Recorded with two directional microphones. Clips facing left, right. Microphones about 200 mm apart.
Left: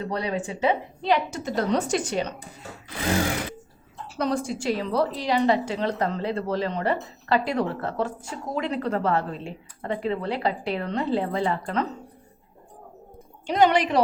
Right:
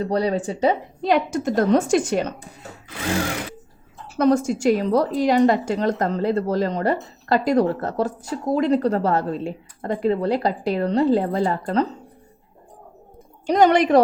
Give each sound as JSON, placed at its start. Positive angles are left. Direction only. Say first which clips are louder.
{"t": 0.0, "sound": "a woman's voice", "louder": "right 6 dB", "side_deg": -35}
{"t": 4.2, "sound": "a woman's voice", "louder": "right 8 dB", "side_deg": -50}
{"t": 13.5, "sound": "a woman's voice", "louder": "right 5 dB", "side_deg": -45}